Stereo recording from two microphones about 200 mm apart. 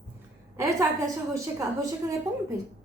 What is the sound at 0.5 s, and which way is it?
A woman's voice, 15° right (ahead or behind).